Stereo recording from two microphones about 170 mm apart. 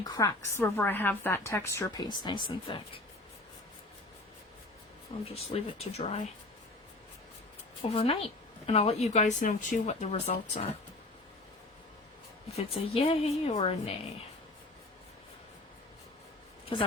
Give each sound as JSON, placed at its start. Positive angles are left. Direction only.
{"t": 0.0, "sound": "a woman's voice", "side_deg": 20}
{"t": 5.3, "sound": "speech", "side_deg": 35}
{"t": 7.8, "sound": "speech", "side_deg": 35}
{"t": 12.7, "sound": "speech", "side_deg": 35}